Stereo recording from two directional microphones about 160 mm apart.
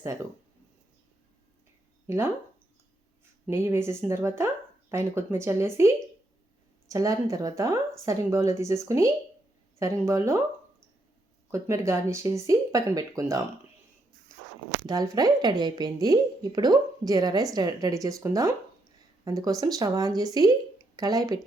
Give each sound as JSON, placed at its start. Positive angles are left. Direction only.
{"t": 2.0, "sound": "speech", "side_deg": -15}
{"t": 3.4, "sound": "speech", "side_deg": -15}
{"t": 6.9, "sound": "speech", "side_deg": -20}
{"t": 11.5, "sound": "speech", "side_deg": -20}
{"t": 14.8, "sound": "speech", "side_deg": -20}